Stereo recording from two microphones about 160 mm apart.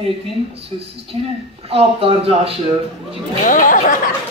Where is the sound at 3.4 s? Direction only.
55° left (ahead or behind).